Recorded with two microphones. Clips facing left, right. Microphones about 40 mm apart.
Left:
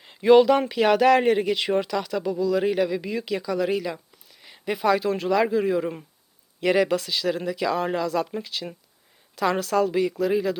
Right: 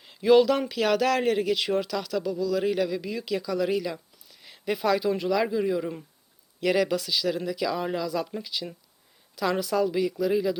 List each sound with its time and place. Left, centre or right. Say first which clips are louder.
0.0 s speech: left 3 dB; centre